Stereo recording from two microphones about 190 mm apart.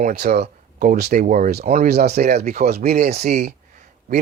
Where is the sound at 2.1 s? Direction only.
55° right (ahead or behind).